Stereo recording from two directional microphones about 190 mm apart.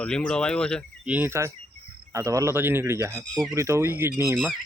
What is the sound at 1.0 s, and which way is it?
A man's voice, 10° right (ahead or behind).